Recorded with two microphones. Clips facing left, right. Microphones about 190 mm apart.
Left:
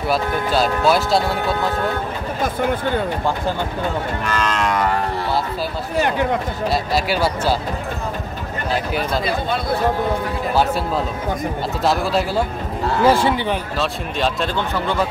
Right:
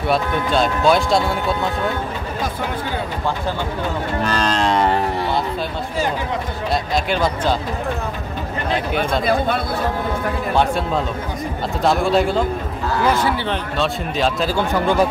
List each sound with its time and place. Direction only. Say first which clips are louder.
0.1 s speech: right 1 dB; 5° left (ahead or behind)
4.2 s livestock: right 4 dB; 35° right (ahead or behind)
5.9 s speech: left 4 dB; 65° left (ahead or behind)
6.7 s speech: even; 5° left (ahead or behind)
10.5 s speech: even; 5° left (ahead or behind)
11.8 s speech: right 3 dB; centre (ahead or behind)
13.0 s speech: left 3 dB; 30° left (ahead or behind)
13.5 s speech: right 1 dB; centre (ahead or behind)
14.7 s speech: right 7 dB; 15° right (ahead or behind)